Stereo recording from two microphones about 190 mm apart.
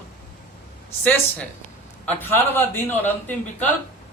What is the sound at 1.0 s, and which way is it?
A man's voice, 10° left (ahead or behind).